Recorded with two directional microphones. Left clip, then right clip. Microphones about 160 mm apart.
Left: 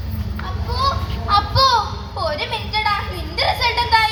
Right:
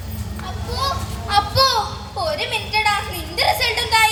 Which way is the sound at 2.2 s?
45° right (ahead or behind).